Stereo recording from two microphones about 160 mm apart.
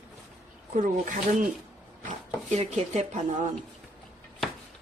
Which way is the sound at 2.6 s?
45° right (ahead or behind).